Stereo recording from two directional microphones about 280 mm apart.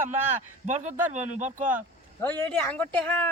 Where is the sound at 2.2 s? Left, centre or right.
Centre.